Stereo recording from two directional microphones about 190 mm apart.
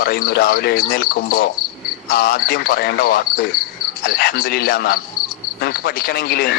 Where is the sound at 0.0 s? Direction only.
50° left (ahead or behind).